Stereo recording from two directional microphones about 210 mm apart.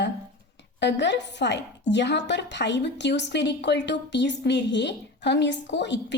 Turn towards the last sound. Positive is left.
turn(degrees=55)  # may be behind; listen again after turning